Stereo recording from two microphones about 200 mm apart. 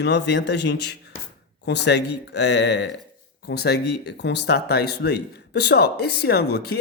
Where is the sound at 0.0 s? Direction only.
60° left (ahead or behind).